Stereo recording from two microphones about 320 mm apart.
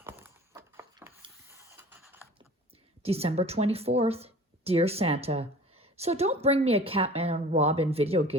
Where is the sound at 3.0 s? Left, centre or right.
Centre.